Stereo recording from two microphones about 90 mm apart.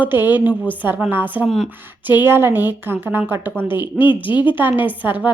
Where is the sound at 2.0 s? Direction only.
20° right (ahead or behind).